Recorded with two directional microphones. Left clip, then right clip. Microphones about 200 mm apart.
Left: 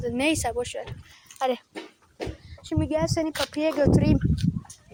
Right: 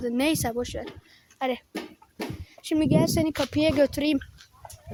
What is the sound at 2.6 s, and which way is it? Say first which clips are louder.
Speech: right 4 dB; 30° right (ahead or behind).